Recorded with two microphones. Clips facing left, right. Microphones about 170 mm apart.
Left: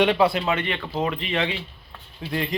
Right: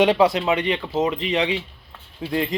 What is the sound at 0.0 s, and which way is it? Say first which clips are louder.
Speech: right 3 dB; 20° right (ahead or behind).